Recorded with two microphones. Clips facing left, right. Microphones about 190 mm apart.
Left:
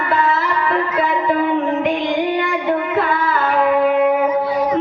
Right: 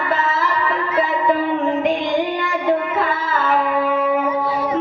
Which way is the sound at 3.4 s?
60° left (ahead or behind).